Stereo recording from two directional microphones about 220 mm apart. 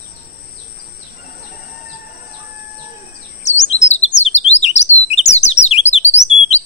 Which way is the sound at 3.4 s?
30° left (ahead or behind).